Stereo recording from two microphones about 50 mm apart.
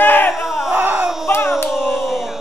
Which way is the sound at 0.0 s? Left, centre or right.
Left.